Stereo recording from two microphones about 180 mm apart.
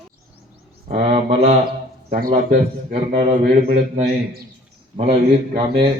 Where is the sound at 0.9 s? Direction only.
35° right (ahead or behind).